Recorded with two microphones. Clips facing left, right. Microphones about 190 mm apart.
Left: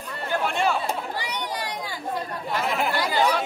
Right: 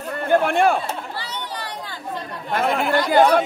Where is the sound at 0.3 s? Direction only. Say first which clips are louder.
Right 7 dB; 55° right (ahead or behind).